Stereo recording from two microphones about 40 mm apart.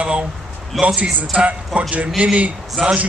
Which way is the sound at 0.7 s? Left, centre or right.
Centre.